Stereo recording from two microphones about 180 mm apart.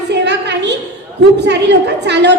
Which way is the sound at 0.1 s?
70° right (ahead or behind).